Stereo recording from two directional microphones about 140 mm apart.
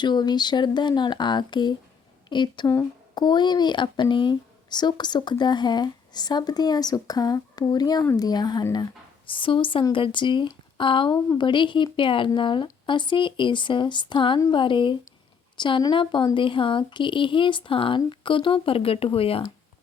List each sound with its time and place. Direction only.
0.0 s a woman's voice: 30° left (ahead or behind)